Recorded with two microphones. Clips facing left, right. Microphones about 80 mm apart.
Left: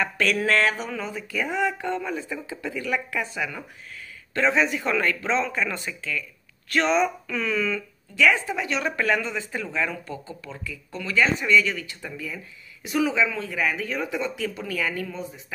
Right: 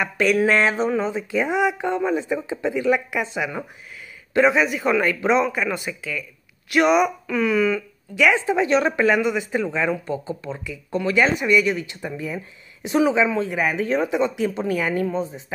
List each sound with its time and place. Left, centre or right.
0.0 s speech: centre
8.9 s speech: centre